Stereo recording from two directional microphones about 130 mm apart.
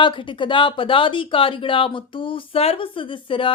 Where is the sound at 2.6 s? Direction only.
45° left (ahead or behind).